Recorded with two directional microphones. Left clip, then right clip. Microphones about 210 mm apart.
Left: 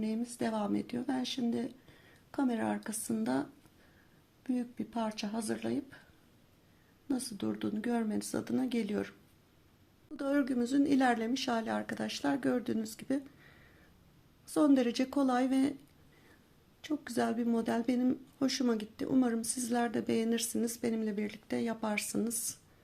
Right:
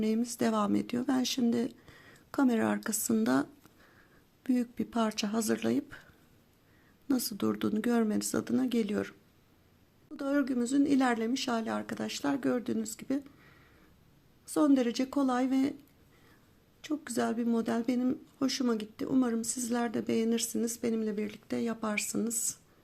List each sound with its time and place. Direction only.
0.0 s speech: 30° right (ahead or behind)
4.4 s speech: 30° right (ahead or behind)
7.1 s speech: 30° right (ahead or behind)
10.2 s speech: 10° right (ahead or behind)
16.8 s speech: 10° right (ahead or behind)